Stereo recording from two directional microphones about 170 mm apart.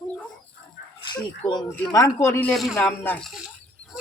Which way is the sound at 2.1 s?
15° left (ahead or behind).